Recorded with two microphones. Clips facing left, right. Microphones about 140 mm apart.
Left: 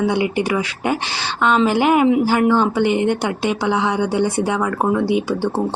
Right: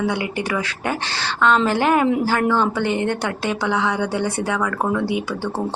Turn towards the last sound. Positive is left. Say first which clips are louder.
# left 5 dB
turn(degrees=25)  # may be behind; listen again after turning